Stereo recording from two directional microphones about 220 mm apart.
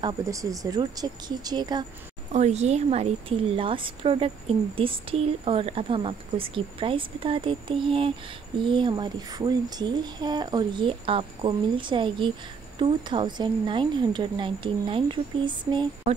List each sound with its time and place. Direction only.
0.0 s speech: 15° right (ahead or behind)
2.3 s a woman's voice: 30° right (ahead or behind)